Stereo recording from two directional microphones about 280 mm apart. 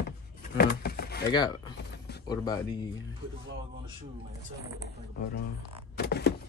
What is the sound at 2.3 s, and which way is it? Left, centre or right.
Speech, centre.